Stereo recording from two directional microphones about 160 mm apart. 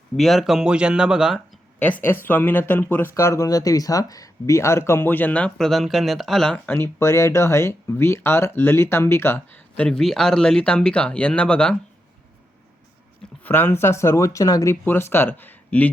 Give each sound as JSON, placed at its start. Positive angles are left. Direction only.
{"t": 0.2, "sound": "speech", "side_deg": 0}
{"t": 1.8, "sound": "speech", "side_deg": 10}
{"t": 13.4, "sound": "speech", "side_deg": 10}